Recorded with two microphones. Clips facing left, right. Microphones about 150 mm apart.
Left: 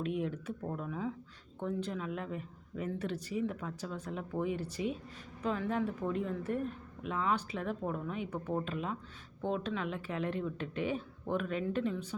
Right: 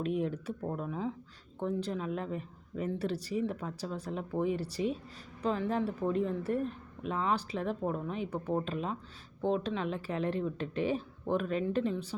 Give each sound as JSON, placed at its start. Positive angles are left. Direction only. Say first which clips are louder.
{"t": 0.0, "sound": "speech", "louder": "right 3 dB", "side_deg": -35}